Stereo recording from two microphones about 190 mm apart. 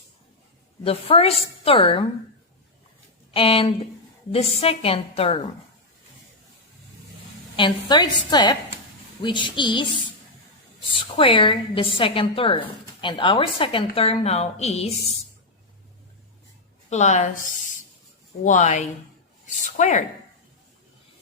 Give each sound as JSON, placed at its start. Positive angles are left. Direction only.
{"t": 0.9, "sound": "a woman's voice", "side_deg": 30}
{"t": 3.3, "sound": "a woman's voice", "side_deg": 30}
{"t": 7.5, "sound": "a woman's voice", "side_deg": 25}
{"t": 16.9, "sound": "a woman's voice", "side_deg": 40}